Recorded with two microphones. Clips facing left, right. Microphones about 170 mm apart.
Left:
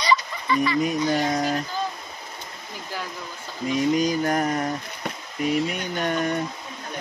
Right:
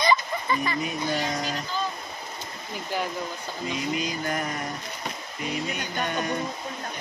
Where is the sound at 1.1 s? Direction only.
50° left (ahead or behind).